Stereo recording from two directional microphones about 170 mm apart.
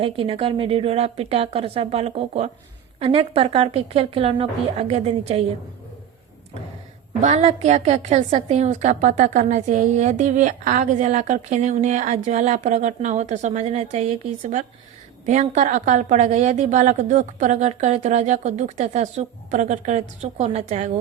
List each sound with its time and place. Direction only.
0.0 s a woman's voice: 35° right (ahead or behind)
7.2 s a woman's voice: 40° right (ahead or behind)